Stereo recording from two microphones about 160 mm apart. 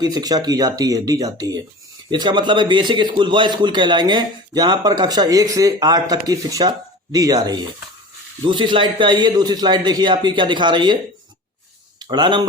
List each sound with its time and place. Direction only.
0.0 s a man's voice: 25° right (ahead or behind)
12.0 s a man's voice: 30° right (ahead or behind)